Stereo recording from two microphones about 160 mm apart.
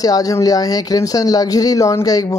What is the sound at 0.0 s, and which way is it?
Speech, 20° left (ahead or behind).